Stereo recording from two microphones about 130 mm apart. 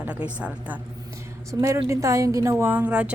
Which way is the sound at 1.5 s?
25° right (ahead or behind).